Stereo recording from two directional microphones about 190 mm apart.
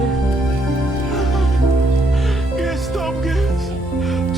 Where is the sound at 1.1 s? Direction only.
Centre (ahead or behind).